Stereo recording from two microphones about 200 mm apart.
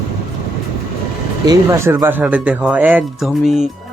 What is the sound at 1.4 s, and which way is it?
Speech, 15° right (ahead or behind).